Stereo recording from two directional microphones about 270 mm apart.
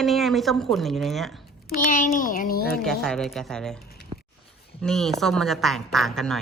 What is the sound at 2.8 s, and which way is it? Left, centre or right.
Speech, centre.